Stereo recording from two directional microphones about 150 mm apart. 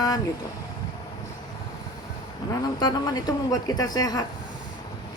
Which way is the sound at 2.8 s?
25° left (ahead or behind).